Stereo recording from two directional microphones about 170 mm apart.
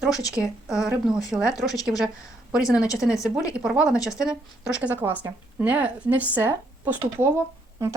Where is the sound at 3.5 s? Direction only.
5° right (ahead or behind).